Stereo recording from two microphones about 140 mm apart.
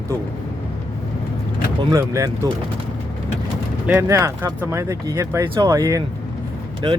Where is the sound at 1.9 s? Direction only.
20° right (ahead or behind).